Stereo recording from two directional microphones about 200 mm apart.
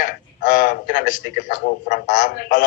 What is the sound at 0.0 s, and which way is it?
Speech, 45° left (ahead or behind).